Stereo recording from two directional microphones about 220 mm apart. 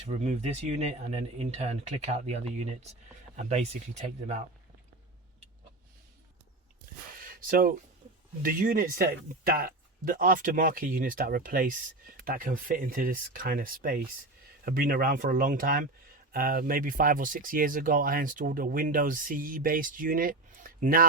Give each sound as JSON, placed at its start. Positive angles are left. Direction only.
{"t": 0.2, "sound": "speech", "side_deg": -30}
{"t": 7.2, "sound": "a sound", "side_deg": -40}
{"t": 8.4, "sound": "speech", "side_deg": -40}